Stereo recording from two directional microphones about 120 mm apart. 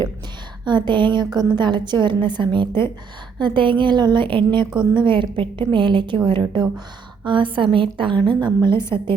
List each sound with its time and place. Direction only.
0.6 s a woman's voice: 40° right (ahead or behind)